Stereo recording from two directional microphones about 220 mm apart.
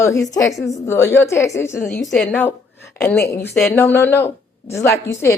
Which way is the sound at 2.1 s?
Centre (ahead or behind).